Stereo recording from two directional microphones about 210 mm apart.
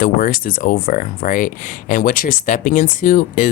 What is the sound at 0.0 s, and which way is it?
Speech, 40° left (ahead or behind).